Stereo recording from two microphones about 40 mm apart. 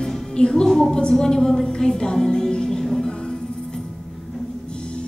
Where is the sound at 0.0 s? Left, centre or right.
Centre.